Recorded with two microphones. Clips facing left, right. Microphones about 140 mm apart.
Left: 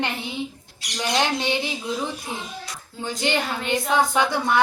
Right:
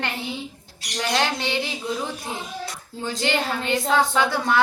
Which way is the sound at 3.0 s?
15° left (ahead or behind).